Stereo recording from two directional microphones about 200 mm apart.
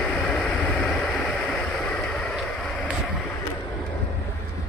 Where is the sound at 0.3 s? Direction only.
Centre (ahead or behind).